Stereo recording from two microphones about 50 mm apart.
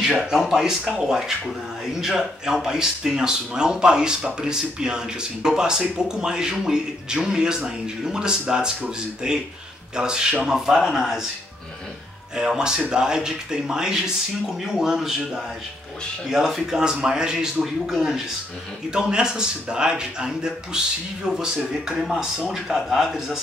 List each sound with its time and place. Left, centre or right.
0.3 s speech: centre
12.4 s speech: centre
22.2 s speech: centre